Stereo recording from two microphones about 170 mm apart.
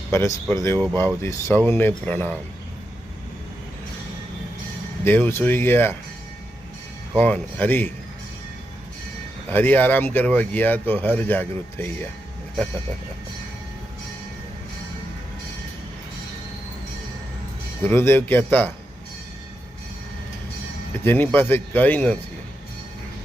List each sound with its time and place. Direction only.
0.1 s speech: 15° left (ahead or behind)
5.0 s speech: 10° left (ahead or behind)
7.2 s speech: 10° left (ahead or behind)
9.5 s speech: 10° left (ahead or behind)
17.8 s speech: 15° left (ahead or behind)
21.0 s speech: 10° left (ahead or behind)